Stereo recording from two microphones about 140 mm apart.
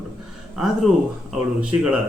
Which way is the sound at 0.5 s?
5° right (ahead or behind).